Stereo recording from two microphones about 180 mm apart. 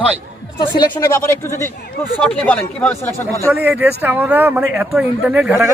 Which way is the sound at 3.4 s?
10° right (ahead or behind).